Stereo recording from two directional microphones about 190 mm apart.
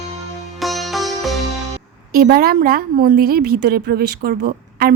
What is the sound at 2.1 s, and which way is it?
A woman's voice, 50° right (ahead or behind).